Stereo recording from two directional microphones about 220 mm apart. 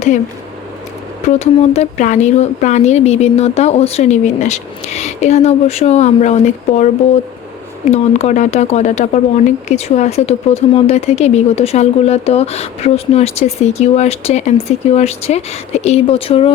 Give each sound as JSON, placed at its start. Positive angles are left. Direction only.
{"t": 1.3, "sound": "a woman's voice", "side_deg": 30}